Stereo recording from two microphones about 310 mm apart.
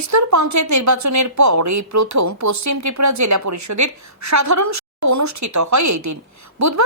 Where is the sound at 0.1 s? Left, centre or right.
Right.